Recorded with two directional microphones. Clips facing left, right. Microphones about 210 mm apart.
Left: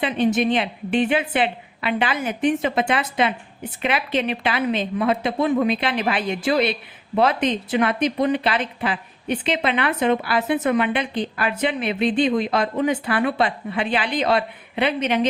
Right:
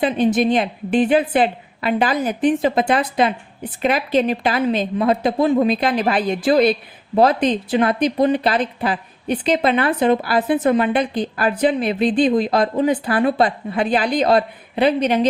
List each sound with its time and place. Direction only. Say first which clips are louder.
0.0 s speech: right 3 dB; 35° right (ahead or behind)